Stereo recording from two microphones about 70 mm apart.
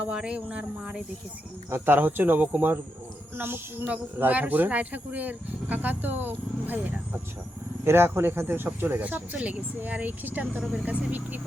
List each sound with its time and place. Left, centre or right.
0.1 s speech: centre
1.7 s speech: right
7.9 s speech: right